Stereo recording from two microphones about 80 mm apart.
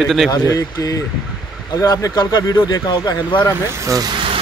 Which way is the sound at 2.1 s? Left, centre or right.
Left.